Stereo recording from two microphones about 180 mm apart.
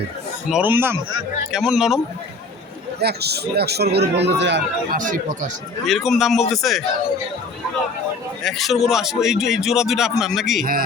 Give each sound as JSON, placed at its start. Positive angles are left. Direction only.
{"t": 0.5, "sound": "a man's voice", "side_deg": -10}
{"t": 3.0, "sound": "a man's voice", "side_deg": -65}
{"t": 4.2, "sound": "speech", "side_deg": -75}
{"t": 4.9, "sound": "speech", "side_deg": -50}
{"t": 5.8, "sound": "a man's voice", "side_deg": 0}
{"t": 8.4, "sound": "a man's voice", "side_deg": 0}
{"t": 10.6, "sound": "speech", "side_deg": -55}